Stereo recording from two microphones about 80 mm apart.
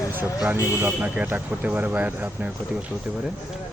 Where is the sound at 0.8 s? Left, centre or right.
Right.